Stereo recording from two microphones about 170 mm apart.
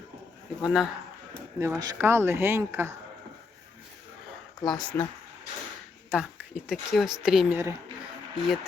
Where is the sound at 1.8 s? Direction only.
20° right (ahead or behind).